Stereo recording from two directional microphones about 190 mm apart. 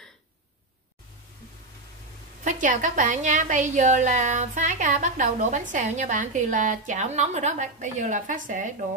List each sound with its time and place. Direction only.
2.4 s a woman's voice: 40° right (ahead or behind)